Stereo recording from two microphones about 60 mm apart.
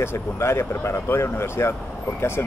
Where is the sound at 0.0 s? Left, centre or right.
Left.